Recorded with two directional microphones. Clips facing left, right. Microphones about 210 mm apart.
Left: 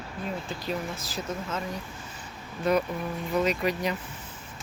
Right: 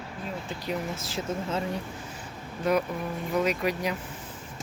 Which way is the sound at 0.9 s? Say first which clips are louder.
Right 2 dB; 25° right (ahead or behind).